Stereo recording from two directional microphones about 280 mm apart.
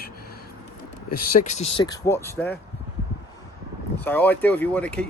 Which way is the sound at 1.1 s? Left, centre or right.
Left.